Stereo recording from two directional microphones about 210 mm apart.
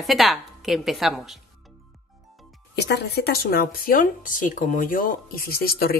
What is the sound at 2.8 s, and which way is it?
Speech, 50° left (ahead or behind).